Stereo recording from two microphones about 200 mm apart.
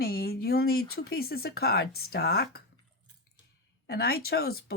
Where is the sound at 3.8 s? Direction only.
50° left (ahead or behind).